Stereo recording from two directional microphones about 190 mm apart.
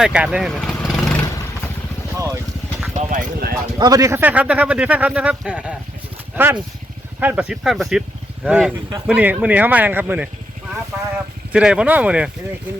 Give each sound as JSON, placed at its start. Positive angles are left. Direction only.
{"t": 0.0, "sound": "vehicle", "side_deg": -5}
{"t": 2.1, "sound": "vehicle", "side_deg": -15}
{"t": 2.9, "sound": "speech", "side_deg": -40}
{"t": 3.8, "sound": "speech", "side_deg": -20}
{"t": 11.5, "sound": "speech", "side_deg": -5}